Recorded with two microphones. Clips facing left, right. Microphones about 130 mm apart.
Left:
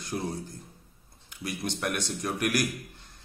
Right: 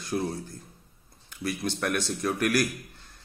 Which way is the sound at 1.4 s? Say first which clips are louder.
Right 3 dB; 20° left (ahead or behind).